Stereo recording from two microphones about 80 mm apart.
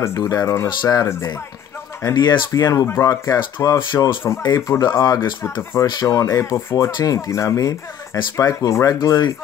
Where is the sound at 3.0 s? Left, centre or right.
Left.